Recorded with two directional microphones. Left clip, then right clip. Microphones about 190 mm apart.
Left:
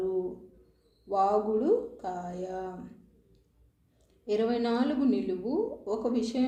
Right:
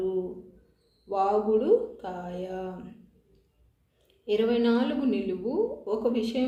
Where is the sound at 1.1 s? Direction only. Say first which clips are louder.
Right 2 dB; 30° left (ahead or behind).